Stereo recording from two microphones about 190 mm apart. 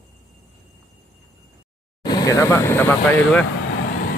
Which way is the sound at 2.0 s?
20° left (ahead or behind).